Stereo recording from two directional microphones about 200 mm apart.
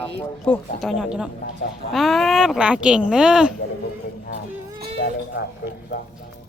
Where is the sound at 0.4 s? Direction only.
5° left (ahead or behind).